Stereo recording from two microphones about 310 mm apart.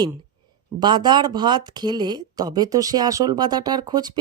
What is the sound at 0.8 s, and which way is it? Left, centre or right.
Speech, centre.